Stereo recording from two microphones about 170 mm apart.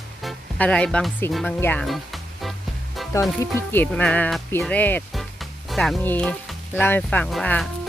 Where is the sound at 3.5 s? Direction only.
10° left (ahead or behind).